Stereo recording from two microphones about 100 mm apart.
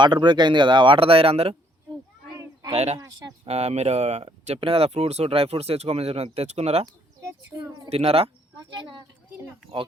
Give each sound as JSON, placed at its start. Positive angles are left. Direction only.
{"t": 0.0, "sound": "speech", "side_deg": -50}
{"t": 2.3, "sound": "a sound", "side_deg": -35}
{"t": 2.7, "sound": "speech", "side_deg": -90}
{"t": 7.9, "sound": "speech", "side_deg": -80}
{"t": 8.5, "sound": "speech", "side_deg": -55}